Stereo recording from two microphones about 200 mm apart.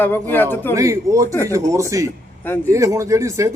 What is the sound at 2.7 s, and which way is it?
Speech, 15° right (ahead or behind).